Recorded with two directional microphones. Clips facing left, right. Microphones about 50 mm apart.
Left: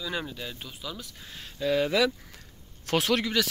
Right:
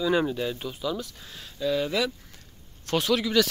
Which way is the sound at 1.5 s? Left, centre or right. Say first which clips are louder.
Left 1 dB; left.